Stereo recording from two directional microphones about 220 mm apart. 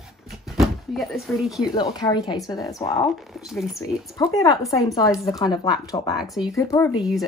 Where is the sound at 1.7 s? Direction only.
20° left (ahead or behind).